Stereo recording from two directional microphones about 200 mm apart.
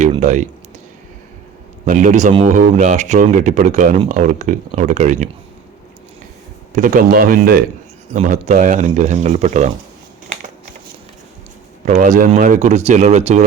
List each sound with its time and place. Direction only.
0.0 s a sound: 35° right (ahead or behind)
1.8 s speech: 40° right (ahead or behind)
6.7 s speech: 40° right (ahead or behind)
8.1 s speech: 35° right (ahead or behind)
11.9 s speech: 35° right (ahead or behind)